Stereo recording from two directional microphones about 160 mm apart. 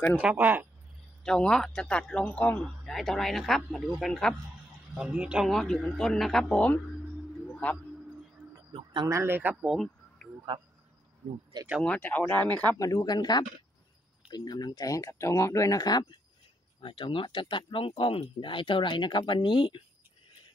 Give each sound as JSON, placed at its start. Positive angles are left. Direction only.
{"t": 0.2, "sound": "speech", "side_deg": -10}
{"t": 1.2, "sound": "speech", "side_deg": 5}
{"t": 8.7, "sound": "speech", "side_deg": -30}
{"t": 9.1, "sound": "speech", "side_deg": -15}
{"t": 11.8, "sound": "speech", "side_deg": 10}
{"t": 12.7, "sound": "speech", "side_deg": 20}